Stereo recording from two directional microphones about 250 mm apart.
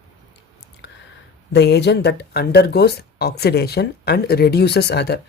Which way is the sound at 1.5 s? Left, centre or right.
Left.